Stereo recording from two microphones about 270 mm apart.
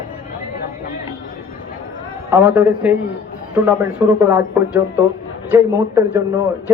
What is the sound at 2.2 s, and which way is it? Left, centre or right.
Speech, centre.